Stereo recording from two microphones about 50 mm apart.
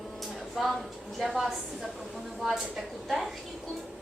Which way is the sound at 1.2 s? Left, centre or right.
Centre.